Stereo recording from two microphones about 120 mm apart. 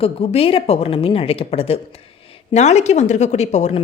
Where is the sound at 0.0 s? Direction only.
55° left (ahead or behind).